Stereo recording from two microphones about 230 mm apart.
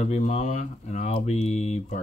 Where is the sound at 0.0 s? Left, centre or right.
Left.